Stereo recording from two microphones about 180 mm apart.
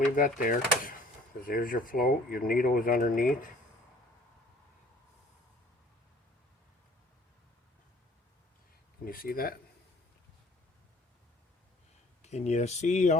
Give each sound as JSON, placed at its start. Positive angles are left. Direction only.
{"t": 0.2, "sound": "speech", "side_deg": 50}
{"t": 9.0, "sound": "speech", "side_deg": 55}
{"t": 12.2, "sound": "speech", "side_deg": 40}